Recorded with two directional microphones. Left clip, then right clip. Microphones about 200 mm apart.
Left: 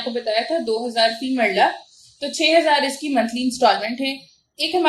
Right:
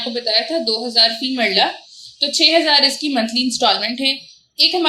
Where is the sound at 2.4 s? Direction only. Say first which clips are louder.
Right 2 dB; 40° right (ahead or behind).